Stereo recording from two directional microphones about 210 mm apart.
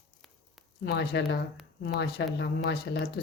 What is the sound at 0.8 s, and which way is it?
Speech, 50° left (ahead or behind).